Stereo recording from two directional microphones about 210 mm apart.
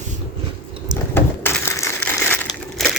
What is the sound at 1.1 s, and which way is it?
Crushing, 10° left (ahead or behind).